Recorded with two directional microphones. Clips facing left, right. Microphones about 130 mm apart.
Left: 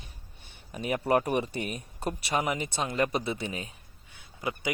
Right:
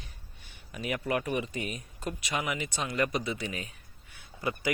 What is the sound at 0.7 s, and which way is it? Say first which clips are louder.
A man's voice: left 5 dB; 35° left (ahead or behind).